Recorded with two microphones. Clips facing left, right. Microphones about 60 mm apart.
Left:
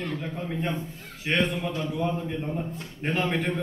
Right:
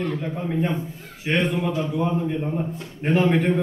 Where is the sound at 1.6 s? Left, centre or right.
Centre.